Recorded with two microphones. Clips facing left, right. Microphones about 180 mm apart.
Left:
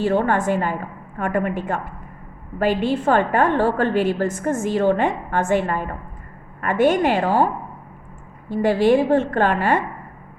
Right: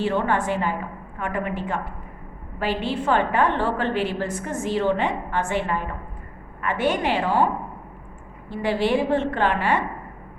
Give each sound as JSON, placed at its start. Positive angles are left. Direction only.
{"t": 0.0, "sound": "a woman's voice", "side_deg": 45}